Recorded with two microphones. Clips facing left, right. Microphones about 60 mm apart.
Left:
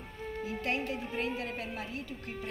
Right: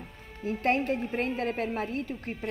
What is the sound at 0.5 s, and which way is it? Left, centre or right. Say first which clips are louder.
A woman's voice: right 9 dB; right.